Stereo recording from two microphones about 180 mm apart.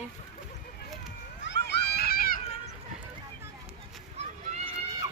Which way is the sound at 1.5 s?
65° left (ahead or behind).